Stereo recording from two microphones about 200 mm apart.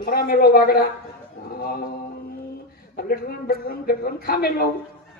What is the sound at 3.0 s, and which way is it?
A woman's voice, 50° left (ahead or behind).